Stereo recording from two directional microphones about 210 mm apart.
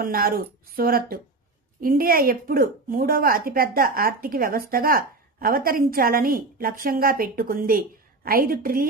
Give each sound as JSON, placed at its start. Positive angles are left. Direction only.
{"t": 0.0, "sound": "a woman's voice", "side_deg": -45}